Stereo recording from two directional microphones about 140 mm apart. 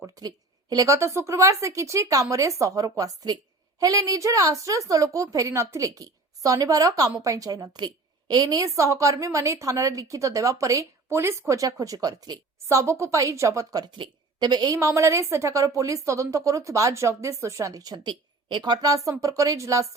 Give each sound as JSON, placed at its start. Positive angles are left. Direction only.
{"t": 0.2, "sound": "a woman's voice", "side_deg": -30}